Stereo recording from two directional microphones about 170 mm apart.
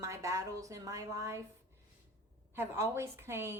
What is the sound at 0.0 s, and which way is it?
Speech, 20° right (ahead or behind).